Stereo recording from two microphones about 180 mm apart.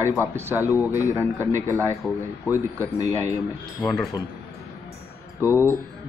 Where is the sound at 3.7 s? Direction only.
Centre (ahead or behind).